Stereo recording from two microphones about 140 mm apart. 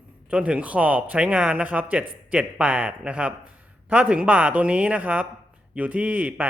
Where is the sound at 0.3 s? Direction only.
10° right (ahead or behind).